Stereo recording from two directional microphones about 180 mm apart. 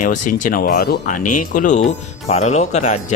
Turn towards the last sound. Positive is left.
turn(degrees=40)  # may be behind; listen again after turning